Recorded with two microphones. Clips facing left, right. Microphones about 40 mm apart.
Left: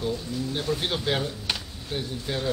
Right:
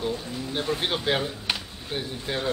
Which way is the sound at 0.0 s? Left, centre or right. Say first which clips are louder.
Left 1 dB; centre.